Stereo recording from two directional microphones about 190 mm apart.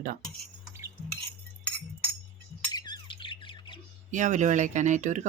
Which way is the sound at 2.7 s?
20° left (ahead or behind).